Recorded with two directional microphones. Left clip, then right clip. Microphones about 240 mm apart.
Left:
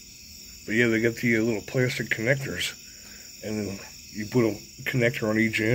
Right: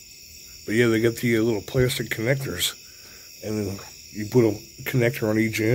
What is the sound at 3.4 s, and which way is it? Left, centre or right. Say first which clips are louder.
Cricket: right 3 dB; centre.